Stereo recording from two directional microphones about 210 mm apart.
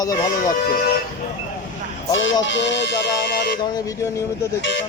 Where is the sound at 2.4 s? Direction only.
60° left (ahead or behind).